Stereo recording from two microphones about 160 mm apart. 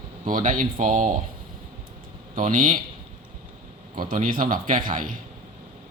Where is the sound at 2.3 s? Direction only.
55° right (ahead or behind).